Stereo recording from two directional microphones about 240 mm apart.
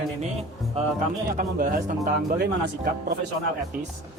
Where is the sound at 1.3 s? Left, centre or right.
Right.